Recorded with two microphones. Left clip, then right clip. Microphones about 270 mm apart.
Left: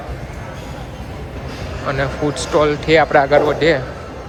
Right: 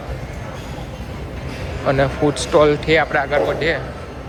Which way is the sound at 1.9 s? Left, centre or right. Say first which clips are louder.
Right 3 dB; centre.